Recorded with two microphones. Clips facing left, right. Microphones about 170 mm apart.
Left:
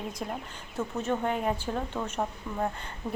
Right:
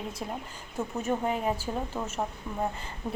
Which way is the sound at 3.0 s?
15° right (ahead or behind).